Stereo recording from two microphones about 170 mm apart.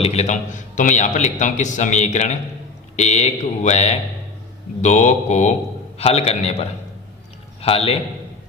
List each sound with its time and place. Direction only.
0.0 s a man's voice: 40° left (ahead or behind)